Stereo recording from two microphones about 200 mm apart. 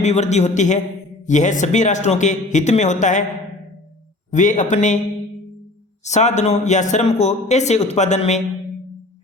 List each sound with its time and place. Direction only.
0.0 s a man's voice: 35° left (ahead or behind)
4.3 s a man's voice: 40° left (ahead or behind)
6.1 s a man's voice: 35° left (ahead or behind)